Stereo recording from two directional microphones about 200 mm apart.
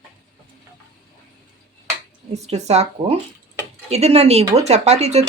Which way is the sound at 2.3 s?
35° right (ahead or behind).